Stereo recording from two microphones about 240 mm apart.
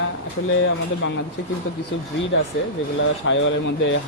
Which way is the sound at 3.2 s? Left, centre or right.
Left.